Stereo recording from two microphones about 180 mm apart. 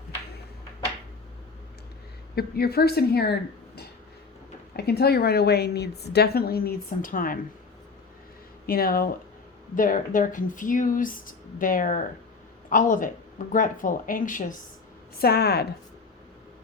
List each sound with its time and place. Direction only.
2.3 s a woman's voice: 60° left (ahead or behind)
4.8 s a woman's voice: 65° left (ahead or behind)
8.6 s a woman's voice: 55° left (ahead or behind)
15.2 s a woman's voice: 60° left (ahead or behind)